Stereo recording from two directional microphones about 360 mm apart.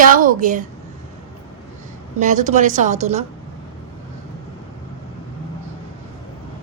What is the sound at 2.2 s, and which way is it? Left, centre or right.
A woman's voice, right.